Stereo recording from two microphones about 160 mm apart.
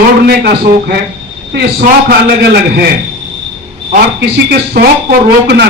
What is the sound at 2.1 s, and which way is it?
Speech, 90° right.